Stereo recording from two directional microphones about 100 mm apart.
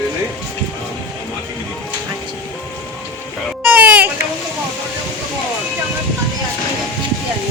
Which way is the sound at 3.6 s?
15° right (ahead or behind).